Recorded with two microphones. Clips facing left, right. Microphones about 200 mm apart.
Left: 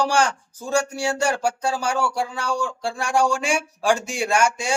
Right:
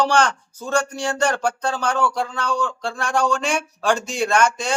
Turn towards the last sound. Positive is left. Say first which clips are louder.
# right 1 dB
turn(degrees=10)  # may be behind; listen again after turning